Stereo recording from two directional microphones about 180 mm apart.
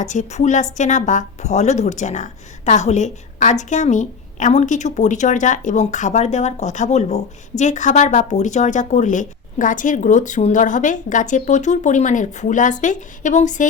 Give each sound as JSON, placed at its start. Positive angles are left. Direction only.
{"t": 0.0, "sound": "speech", "side_deg": 40}